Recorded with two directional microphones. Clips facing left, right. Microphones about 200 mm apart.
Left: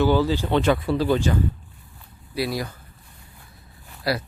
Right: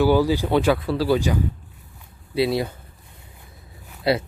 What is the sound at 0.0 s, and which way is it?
Speech, 10° right (ahead or behind).